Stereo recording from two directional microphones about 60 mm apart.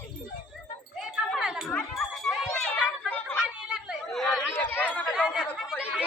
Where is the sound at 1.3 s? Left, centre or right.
Centre.